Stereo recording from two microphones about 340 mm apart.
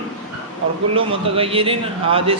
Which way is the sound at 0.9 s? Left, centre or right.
Centre.